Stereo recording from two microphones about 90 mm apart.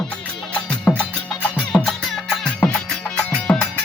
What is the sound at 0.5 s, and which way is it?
Music, 10° left (ahead or behind).